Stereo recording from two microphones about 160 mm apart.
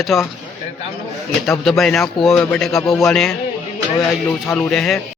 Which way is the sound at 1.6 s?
Centre (ahead or behind).